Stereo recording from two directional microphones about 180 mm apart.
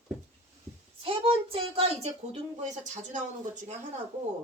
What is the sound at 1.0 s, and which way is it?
A child's voice, 30° right (ahead or behind).